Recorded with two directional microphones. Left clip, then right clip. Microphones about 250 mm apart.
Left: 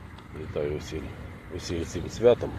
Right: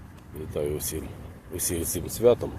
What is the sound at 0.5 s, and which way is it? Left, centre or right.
Speech, centre.